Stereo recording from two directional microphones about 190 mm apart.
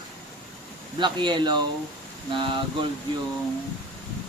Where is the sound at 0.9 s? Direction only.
25° right (ahead or behind).